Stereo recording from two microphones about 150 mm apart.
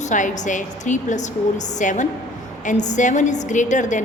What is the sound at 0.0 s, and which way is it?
A woman's voice, 55° left (ahead or behind).